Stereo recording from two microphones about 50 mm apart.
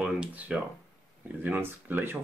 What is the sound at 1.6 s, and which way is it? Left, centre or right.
Speech, right.